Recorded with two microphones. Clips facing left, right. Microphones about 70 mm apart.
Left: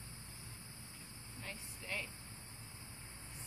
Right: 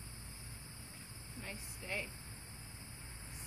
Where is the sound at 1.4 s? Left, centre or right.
Centre.